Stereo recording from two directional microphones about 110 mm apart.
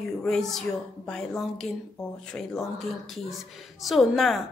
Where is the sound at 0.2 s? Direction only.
5° left (ahead or behind).